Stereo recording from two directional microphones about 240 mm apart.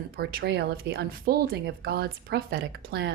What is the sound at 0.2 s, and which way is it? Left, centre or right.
A woman's voice, right.